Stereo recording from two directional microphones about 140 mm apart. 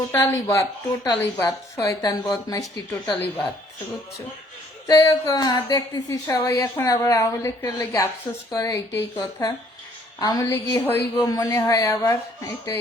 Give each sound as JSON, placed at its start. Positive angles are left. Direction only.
{"t": 0.1, "sound": "a woman's voice", "side_deg": 20}
{"t": 3.2, "sound": "speech", "side_deg": 10}
{"t": 4.9, "sound": "a woman's voice", "side_deg": 25}